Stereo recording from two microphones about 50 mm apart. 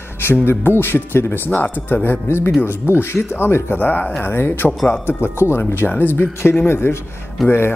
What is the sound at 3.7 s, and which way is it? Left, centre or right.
Speech, left.